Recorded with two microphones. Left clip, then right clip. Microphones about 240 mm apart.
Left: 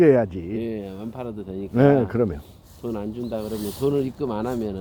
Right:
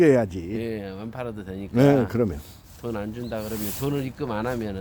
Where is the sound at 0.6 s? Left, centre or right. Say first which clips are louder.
Left 1 dB; right.